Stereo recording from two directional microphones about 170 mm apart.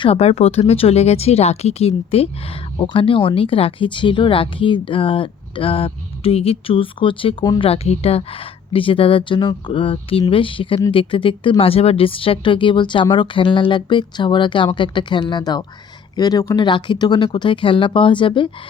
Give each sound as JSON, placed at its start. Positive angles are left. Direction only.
{"t": 0.0, "sound": "speech", "side_deg": 35}